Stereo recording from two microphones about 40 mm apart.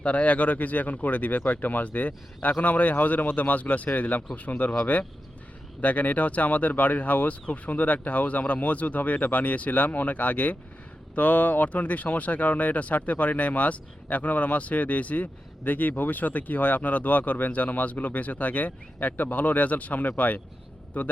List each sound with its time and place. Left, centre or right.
0.0 s speech: left